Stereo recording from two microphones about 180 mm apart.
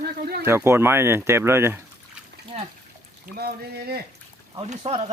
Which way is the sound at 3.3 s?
60° right (ahead or behind).